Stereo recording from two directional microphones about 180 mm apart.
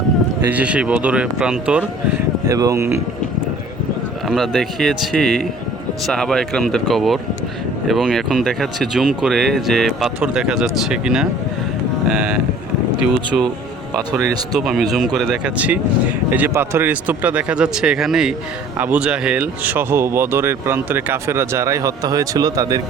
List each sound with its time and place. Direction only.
0.5 s speech: 5° right (ahead or behind)
2.5 s speech: 20° right (ahead or behind)
4.3 s speech: centre (ahead or behind)
14.6 s speech: centre (ahead or behind); by 22.8 s 20° right (ahead or behind)